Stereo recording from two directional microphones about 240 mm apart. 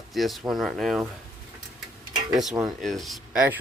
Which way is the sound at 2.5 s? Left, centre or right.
Centre.